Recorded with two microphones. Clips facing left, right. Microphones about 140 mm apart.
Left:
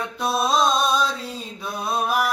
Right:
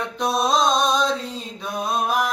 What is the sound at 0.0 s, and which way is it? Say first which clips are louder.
Mantra: right 1 dB; 5° left (ahead or behind).